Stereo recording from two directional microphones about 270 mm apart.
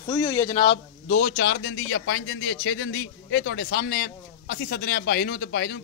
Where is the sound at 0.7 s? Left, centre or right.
Left.